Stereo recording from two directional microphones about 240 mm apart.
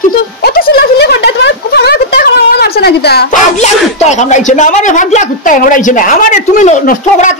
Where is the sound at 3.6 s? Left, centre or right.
Left.